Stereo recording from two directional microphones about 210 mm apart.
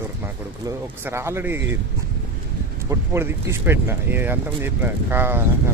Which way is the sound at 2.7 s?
15° right (ahead or behind).